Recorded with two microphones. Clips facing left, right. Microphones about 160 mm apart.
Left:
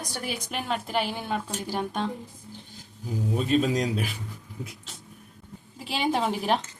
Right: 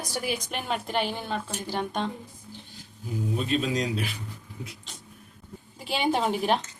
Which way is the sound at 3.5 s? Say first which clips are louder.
Left 4 dB; 45° left (ahead or behind).